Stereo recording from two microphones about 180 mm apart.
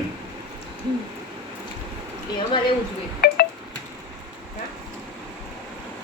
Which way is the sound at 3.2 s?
55° left (ahead or behind).